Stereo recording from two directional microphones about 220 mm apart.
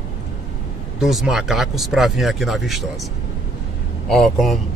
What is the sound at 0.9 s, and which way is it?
Speech, centre (ahead or behind).